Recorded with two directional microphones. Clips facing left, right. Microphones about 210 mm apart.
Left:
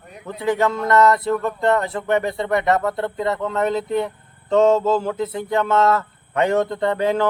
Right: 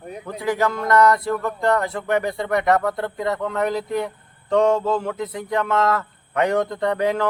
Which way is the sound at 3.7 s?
25° left (ahead or behind).